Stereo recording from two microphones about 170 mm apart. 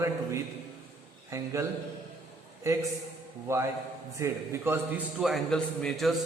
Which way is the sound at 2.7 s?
15° right (ahead or behind).